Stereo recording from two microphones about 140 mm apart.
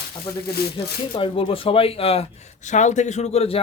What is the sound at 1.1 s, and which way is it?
A man's voice, 40° left (ahead or behind).